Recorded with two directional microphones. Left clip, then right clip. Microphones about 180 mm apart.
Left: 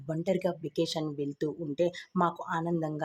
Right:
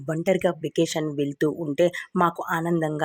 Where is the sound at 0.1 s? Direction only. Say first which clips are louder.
Right 8 dB; 30° right (ahead or behind).